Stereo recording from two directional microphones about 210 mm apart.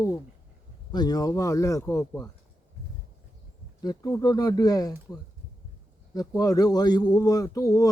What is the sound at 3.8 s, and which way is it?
Speech, 15° left (ahead or behind).